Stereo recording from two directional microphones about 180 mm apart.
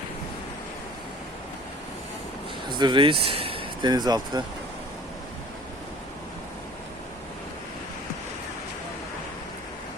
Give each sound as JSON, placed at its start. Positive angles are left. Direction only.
{"t": 2.6, "sound": "speech", "side_deg": -25}